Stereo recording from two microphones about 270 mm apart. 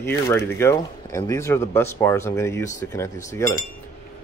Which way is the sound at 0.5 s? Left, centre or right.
Centre.